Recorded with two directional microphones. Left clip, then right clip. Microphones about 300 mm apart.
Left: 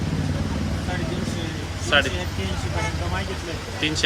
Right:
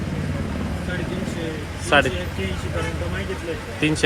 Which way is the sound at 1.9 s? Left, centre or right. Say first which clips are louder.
Right 2 dB; centre.